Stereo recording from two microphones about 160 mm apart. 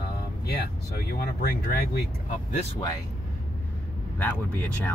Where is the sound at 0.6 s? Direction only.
75° left (ahead or behind).